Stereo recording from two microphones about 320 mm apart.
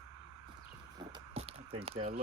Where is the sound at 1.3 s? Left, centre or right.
Centre.